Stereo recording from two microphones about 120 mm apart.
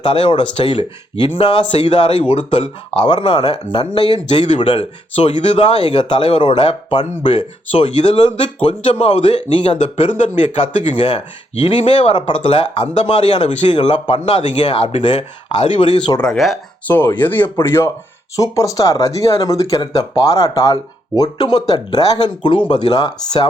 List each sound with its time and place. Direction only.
0.0 s speech: 45° left (ahead or behind)
3.1 s speech: 40° left (ahead or behind)
4.3 s speech: 65° left (ahead or behind)
4.7 s speech: 50° left (ahead or behind); by 9.4 s 65° left (ahead or behind)
9.5 s speech: 50° left (ahead or behind)
16.2 s speech: 5° left (ahead or behind)
16.8 s speech: 15° left (ahead or behind); by 23.5 s 35° left (ahead or behind)